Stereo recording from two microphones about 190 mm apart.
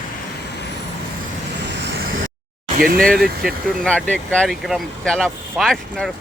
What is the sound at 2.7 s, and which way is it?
Speech, 50° right (ahead or behind).